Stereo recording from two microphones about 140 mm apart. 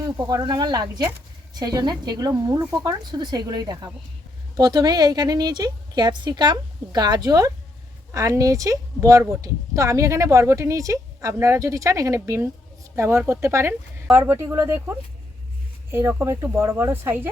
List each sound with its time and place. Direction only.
0.0 s speech: 30° right (ahead or behind)